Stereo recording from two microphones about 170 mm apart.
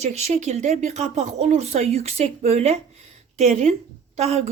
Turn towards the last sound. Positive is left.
turn(degrees=-40)  # may be behind; listen again after turning